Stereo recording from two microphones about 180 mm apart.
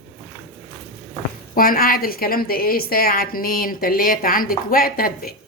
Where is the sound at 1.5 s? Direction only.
50° left (ahead or behind).